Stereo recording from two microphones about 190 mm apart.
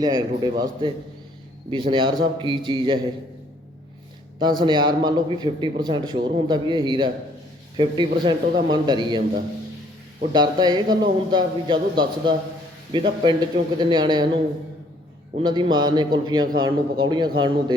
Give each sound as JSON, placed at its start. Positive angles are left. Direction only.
{"t": 0.0, "sound": "a man's voice", "side_deg": -20}
{"t": 4.4, "sound": "a man's voice", "side_deg": -20}
{"t": 10.3, "sound": "a man's voice", "side_deg": -20}
{"t": 15.4, "sound": "a man's voice", "side_deg": -25}